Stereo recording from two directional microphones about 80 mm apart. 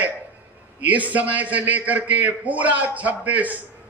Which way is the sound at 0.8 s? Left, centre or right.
Centre.